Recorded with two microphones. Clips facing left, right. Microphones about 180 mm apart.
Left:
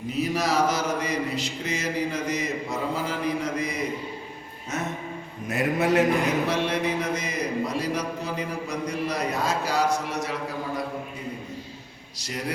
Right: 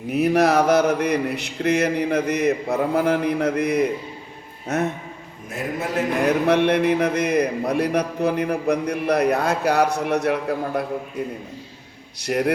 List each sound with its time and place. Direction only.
0.1 s speech: 60° right (ahead or behind)
5.5 s a man's voice: 65° left (ahead or behind)
6.2 s speech: 60° right (ahead or behind)
12.2 s speech: 60° right (ahead or behind)